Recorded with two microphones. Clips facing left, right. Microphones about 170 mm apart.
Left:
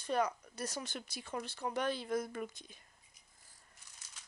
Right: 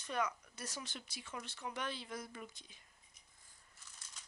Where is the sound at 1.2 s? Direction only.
35° left (ahead or behind); by 2.8 s 55° left (ahead or behind).